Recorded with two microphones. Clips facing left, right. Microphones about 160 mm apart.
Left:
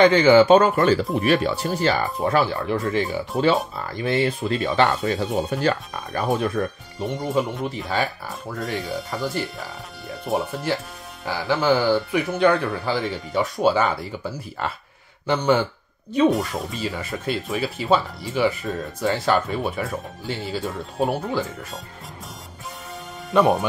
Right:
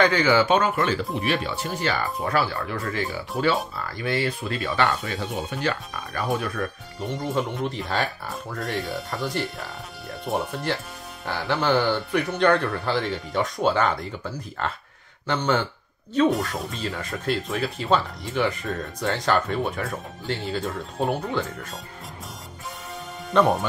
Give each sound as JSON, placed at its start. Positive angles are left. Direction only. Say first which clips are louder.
{"t": 0.0, "sound": "speech", "louder": "left 6 dB", "side_deg": 25}
{"t": 1.2, "sound": "speech", "louder": "left 6 dB", "side_deg": 45}
{"t": 2.0, "sound": "speech", "louder": "left 4 dB", "side_deg": 20}
{"t": 6.2, "sound": "speech", "louder": "left 4 dB", "side_deg": 25}
{"t": 7.2, "sound": "speech", "louder": "left 2 dB", "side_deg": 0}
{"t": 16.3, "sound": "speech", "louder": "left 2 dB", "side_deg": 0}
{"t": 23.3, "sound": "speech", "louder": "left 2 dB", "side_deg": 0}